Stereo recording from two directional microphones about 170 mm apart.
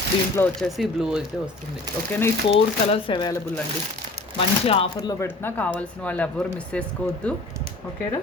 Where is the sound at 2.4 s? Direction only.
30° left (ahead or behind).